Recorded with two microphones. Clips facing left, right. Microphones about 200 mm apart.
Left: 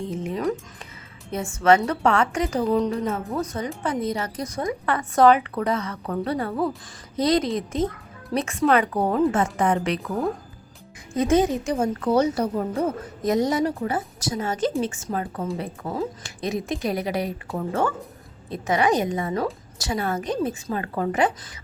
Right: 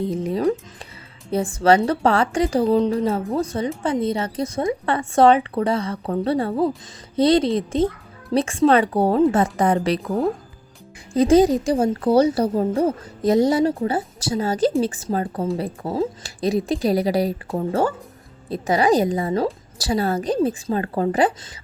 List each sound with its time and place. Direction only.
0.0 s music: 35° right (ahead or behind)
1.3 s a woman's voice: 35° right (ahead or behind)